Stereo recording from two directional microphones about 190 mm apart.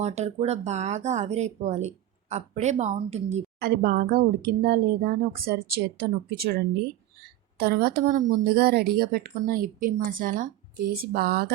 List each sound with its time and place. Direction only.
0.0 s speech: 35° right (ahead or behind)
3.6 s speech: 55° right (ahead or behind)
8.4 s speech: 55° right (ahead or behind)